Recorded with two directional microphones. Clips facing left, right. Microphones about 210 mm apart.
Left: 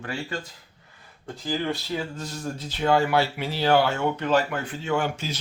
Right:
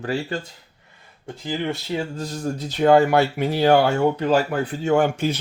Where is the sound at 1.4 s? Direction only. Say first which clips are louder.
Right 2 dB; 20° right (ahead or behind).